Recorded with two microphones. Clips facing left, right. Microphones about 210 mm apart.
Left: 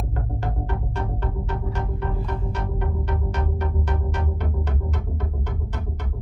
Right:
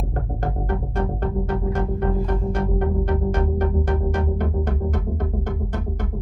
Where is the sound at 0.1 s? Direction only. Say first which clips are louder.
Right 3 dB; 50° right (ahead or behind).